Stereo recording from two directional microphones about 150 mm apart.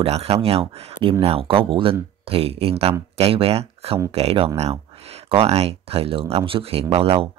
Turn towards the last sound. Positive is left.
turn(degrees=-40)  # may be behind; listen again after turning